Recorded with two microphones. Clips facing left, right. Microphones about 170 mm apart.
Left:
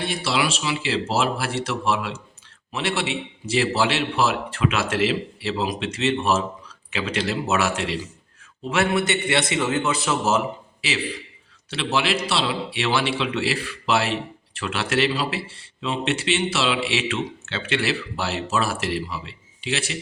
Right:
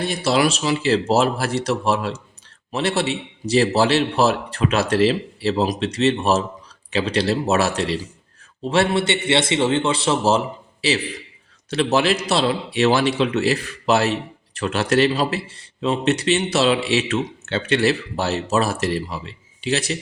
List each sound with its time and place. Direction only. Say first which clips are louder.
0.0 s speech: right 5 dB; 40° right (ahead or behind)